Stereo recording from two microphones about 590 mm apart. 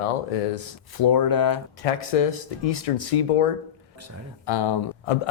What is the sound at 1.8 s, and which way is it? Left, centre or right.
Speech, left.